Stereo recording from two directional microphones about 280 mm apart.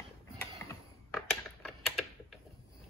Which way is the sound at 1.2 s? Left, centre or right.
Centre.